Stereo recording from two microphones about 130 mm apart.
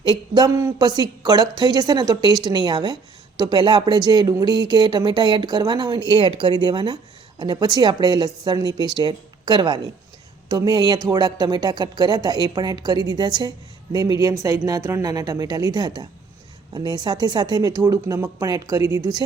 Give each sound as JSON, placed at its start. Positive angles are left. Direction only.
{"t": 0.0, "sound": "a woman's voice", "side_deg": -35}